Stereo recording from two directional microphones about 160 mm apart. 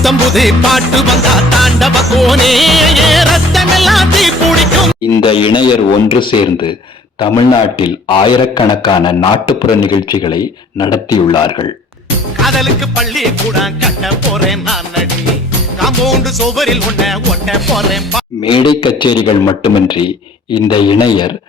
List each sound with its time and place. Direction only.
0.0 s music: centre (ahead or behind)
5.2 s speech: 30° left (ahead or behind)
12.4 s music: centre (ahead or behind)
15.8 s music: centre (ahead or behind)
18.4 s speech: 30° left (ahead or behind)
20.5 s speech: 30° left (ahead or behind)